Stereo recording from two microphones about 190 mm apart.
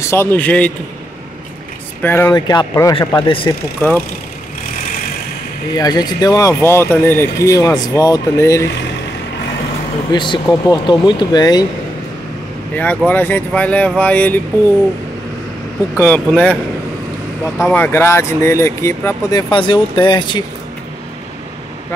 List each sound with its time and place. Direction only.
0.0 s speech: 15° left (ahead or behind)
2.0 s speech: 10° left (ahead or behind)
5.8 s speech: 20° left (ahead or behind)
10.1 s speech: 25° left (ahead or behind)
12.7 s speech: 10° left (ahead or behind)
16.0 s speech: 5° left (ahead or behind)
17.6 s speech: 5° left (ahead or behind)
19.5 s speech: 25° left (ahead or behind)